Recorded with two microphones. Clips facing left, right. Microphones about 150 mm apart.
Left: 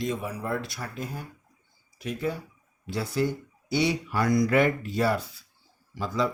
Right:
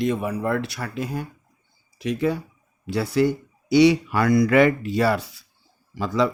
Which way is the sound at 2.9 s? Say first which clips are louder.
Right 7 dB; 70° right (ahead or behind).